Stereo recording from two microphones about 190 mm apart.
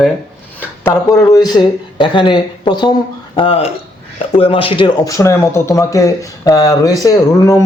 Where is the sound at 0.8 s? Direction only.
15° left (ahead or behind).